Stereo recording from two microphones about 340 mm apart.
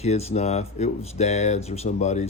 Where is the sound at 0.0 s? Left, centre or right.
Centre.